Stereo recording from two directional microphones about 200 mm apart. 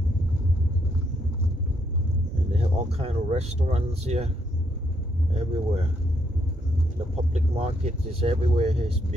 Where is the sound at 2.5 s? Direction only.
30° right (ahead or behind).